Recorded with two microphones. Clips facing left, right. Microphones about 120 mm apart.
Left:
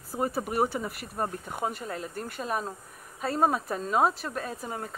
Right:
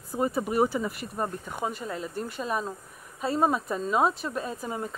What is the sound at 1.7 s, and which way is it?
Speech, 50° left (ahead or behind).